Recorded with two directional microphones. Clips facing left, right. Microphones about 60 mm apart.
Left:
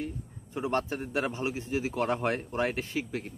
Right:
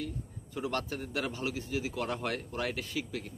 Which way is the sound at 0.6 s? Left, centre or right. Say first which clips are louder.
Left 4 dB; left.